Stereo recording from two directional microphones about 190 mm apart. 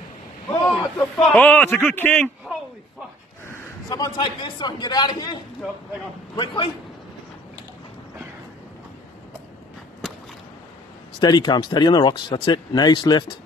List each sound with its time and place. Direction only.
0.7 s a man's voice: 5° left (ahead or behind)
3.4 s a man's voice: 15° left (ahead or behind)
11.1 s speech: 20° left (ahead or behind)